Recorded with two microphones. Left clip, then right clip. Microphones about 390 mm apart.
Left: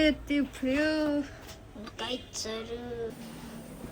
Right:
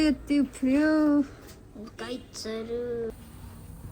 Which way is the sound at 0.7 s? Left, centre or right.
Centre.